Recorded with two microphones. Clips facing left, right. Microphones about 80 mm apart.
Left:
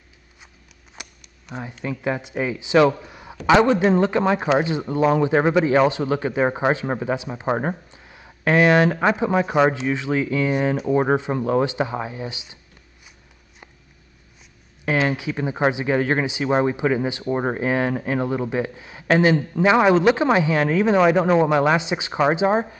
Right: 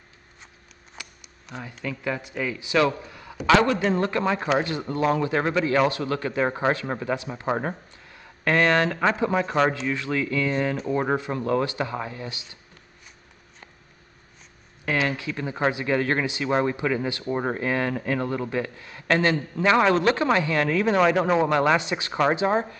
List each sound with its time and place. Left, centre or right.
1.0 s shuffling cards: left
1.6 s a man's voice: left
15.0 s a man's voice: centre